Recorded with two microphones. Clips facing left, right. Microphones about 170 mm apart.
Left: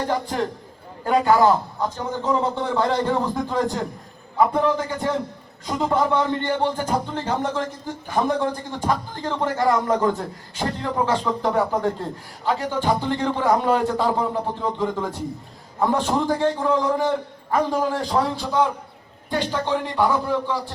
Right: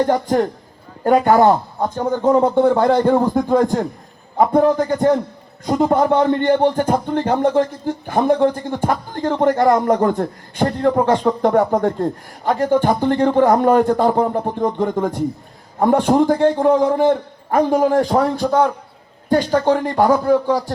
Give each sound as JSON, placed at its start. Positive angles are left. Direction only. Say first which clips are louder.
{"t": 0.1, "sound": "a man's voice", "louder": "right 7 dB", "side_deg": -45}
{"t": 1.8, "sound": "a man's voice", "louder": "right 8 dB", "side_deg": -50}